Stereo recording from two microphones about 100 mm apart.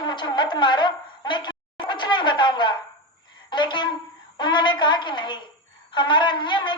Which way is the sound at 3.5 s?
50° left (ahead or behind).